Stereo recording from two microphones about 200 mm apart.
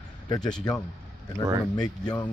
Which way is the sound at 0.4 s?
5° left (ahead or behind).